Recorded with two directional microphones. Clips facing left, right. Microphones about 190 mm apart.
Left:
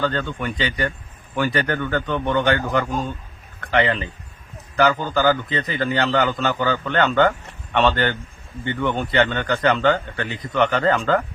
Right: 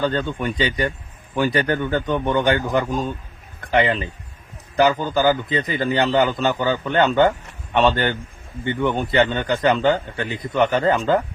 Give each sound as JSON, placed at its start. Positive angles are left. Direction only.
{"t": 0.0, "sound": "a man's voice", "side_deg": -15}